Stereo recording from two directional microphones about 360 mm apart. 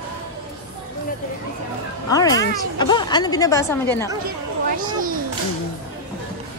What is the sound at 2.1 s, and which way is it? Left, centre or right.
A woman's voice, centre.